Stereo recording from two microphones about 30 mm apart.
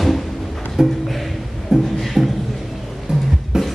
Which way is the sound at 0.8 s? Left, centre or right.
Centre.